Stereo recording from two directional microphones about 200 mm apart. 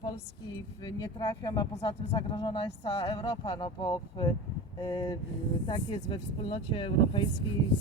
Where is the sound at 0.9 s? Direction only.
20° left (ahead or behind).